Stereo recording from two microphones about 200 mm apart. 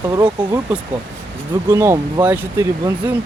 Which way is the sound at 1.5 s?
15° right (ahead or behind).